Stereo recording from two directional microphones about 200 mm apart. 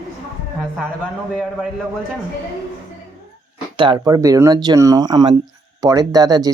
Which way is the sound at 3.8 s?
20° right (ahead or behind).